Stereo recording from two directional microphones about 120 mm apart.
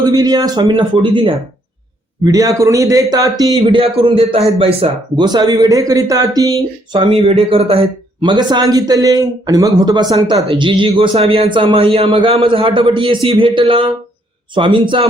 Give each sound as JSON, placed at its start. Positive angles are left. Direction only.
{"t": 0.0, "sound": "a man's voice", "side_deg": -35}
{"t": 2.2, "sound": "a man's voice", "side_deg": -30}
{"t": 3.7, "sound": "a man's voice", "side_deg": -50}
{"t": 5.1, "sound": "a man's voice", "side_deg": -35}
{"t": 7.0, "sound": "a man's voice", "side_deg": -50}
{"t": 8.2, "sound": "a man's voice", "side_deg": -35}
{"t": 10.5, "sound": "a man's voice", "side_deg": -45}